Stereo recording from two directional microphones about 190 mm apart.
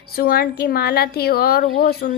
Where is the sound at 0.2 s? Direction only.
55° left (ahead or behind).